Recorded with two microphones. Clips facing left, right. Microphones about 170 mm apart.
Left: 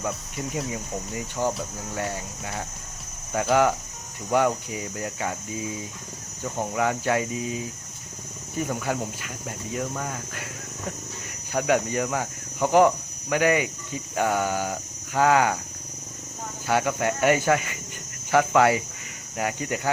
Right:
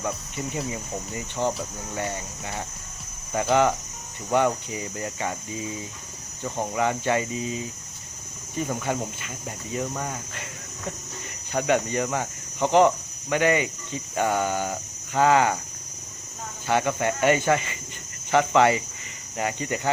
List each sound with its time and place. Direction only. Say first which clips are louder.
0.0 s speech: even; centre (ahead or behind)
8.7 s speech: right 1 dB; centre (ahead or behind)
16.6 s speech: even; 5° left (ahead or behind)